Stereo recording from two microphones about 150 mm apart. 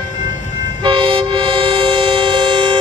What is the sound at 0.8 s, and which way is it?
Train, 35° right (ahead or behind).